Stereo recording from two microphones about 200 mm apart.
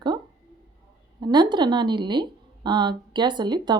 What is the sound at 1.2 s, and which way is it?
A woman's voice, 20° right (ahead or behind).